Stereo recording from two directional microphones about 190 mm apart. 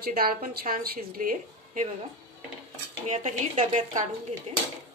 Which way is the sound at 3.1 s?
40° right (ahead or behind).